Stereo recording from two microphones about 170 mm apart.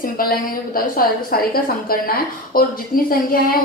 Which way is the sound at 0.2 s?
60° left (ahead or behind).